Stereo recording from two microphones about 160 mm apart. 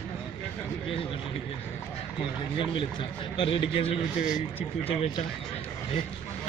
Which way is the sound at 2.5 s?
30° left (ahead or behind).